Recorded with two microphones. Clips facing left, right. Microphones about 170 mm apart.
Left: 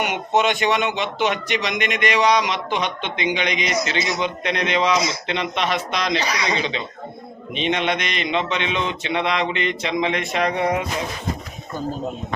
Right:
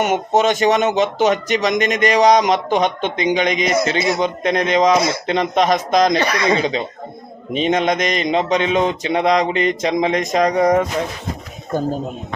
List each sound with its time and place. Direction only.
0.0 s speech: 45° right (ahead or behind)
7.5 s mantra: 40° right (ahead or behind)